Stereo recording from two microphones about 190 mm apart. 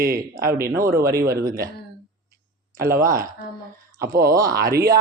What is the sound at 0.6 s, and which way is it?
Speech, 15° right (ahead or behind).